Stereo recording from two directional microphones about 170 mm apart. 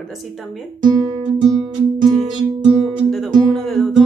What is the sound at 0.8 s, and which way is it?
Speech, 25° right (ahead or behind).